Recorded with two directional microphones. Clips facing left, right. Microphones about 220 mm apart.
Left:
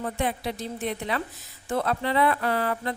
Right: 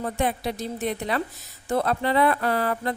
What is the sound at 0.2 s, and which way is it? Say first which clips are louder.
Speech: right 4 dB; 40° right (ahead or behind).